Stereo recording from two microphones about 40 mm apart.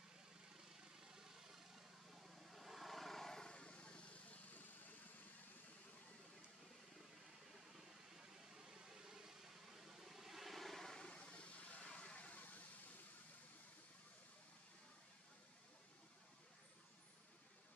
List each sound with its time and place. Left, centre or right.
1.0 s vehicle: centre
3.5 s vehicle: left
7.7 s vehicle: centre
11.0 s vehicle: left